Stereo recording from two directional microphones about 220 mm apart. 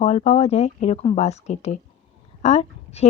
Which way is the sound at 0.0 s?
30° left (ahead or behind).